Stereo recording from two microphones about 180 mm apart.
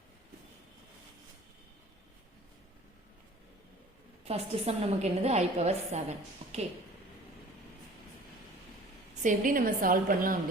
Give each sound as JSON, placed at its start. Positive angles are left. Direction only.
{"t": 4.3, "sound": "a woman's voice", "side_deg": -35}
{"t": 9.2, "sound": "a woman's voice", "side_deg": -45}